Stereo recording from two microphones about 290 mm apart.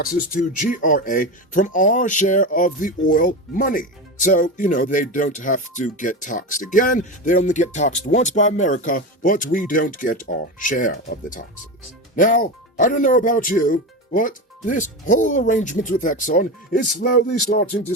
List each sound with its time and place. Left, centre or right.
0.0 s speech: left